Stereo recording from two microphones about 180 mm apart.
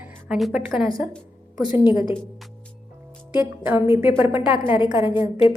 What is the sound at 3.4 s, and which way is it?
A woman's voice, 10° right (ahead or behind).